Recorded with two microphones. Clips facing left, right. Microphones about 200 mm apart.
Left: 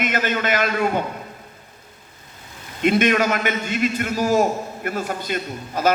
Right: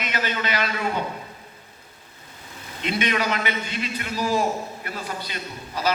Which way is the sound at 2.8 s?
50° left (ahead or behind).